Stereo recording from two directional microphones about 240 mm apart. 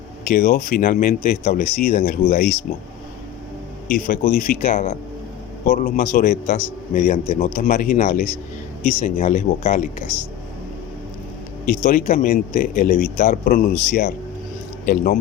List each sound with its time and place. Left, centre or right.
0.3 s a man's voice: left
3.9 s a man's voice: left
11.6 s a man's voice: left